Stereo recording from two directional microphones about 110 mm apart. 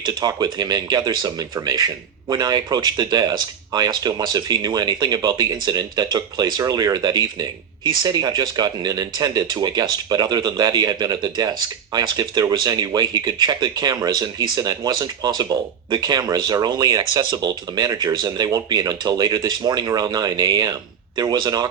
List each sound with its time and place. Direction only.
0.0 s speech: 40° right (ahead or behind)